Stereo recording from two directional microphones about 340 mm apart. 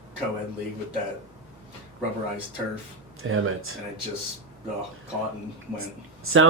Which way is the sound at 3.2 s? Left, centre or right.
Right.